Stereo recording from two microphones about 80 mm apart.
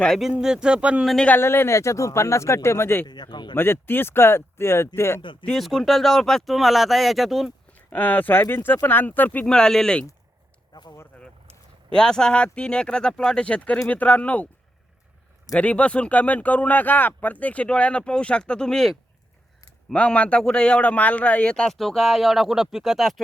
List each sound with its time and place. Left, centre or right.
0.2 s speech: centre
1.4 s speech: left
3.1 s speech: left
3.5 s speech: left
5.2 s speech: left
5.5 s speech: centre
7.7 s speech: left
9.5 s speech: centre
10.7 s speech: left
11.9 s speech: centre
15.5 s speech: centre